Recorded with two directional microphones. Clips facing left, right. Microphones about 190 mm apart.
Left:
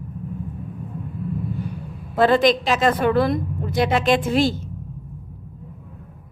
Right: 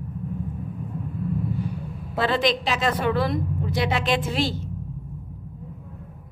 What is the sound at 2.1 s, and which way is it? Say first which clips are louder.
A woman's voice: left 6 dB; 45° left (ahead or behind).